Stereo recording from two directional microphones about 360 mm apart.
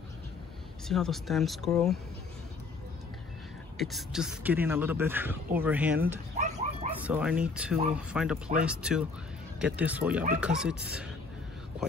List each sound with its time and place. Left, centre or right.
0.8 s speech: centre
3.7 s speech: centre
6.3 s dog: centre
7.0 s speech: centre